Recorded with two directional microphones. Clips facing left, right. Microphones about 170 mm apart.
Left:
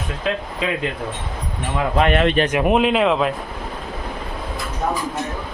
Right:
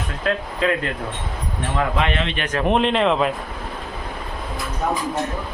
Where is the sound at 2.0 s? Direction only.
50° left (ahead or behind).